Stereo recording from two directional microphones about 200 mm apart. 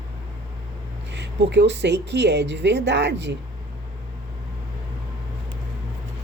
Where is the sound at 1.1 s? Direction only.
60° right (ahead or behind).